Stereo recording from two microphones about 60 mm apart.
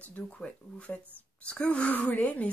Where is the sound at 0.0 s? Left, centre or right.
Left.